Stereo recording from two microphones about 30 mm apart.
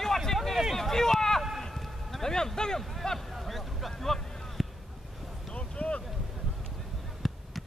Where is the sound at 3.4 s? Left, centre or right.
Centre.